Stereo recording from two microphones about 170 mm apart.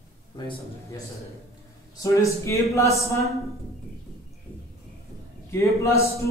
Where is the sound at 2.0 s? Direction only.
20° left (ahead or behind).